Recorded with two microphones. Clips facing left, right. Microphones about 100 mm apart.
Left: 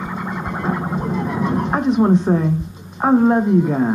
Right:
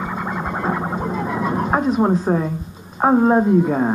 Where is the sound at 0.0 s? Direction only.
15° right (ahead or behind).